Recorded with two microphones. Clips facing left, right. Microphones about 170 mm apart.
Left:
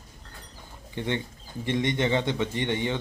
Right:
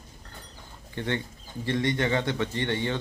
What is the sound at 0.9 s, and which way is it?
A man's voice, 15° left (ahead or behind).